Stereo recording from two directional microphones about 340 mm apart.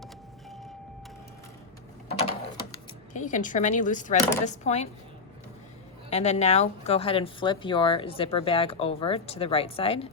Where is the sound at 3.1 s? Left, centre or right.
Left.